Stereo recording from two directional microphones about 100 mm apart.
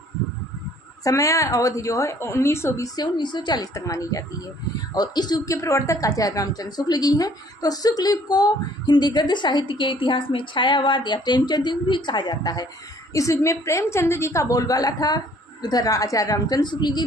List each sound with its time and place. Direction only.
1.0 s a woman's voice: 35° left (ahead or behind)
13.1 s a woman's voice: 30° left (ahead or behind); by 17.0 s 45° left (ahead or behind)